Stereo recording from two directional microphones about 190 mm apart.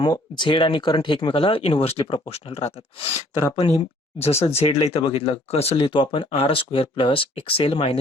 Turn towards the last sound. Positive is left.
turn(degrees=30)  # may be behind; listen again after turning